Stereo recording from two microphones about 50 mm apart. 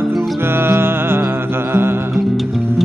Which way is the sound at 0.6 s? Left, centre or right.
Right.